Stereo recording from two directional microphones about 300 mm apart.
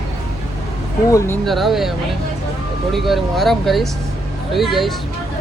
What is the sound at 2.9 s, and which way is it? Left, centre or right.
Speech, centre.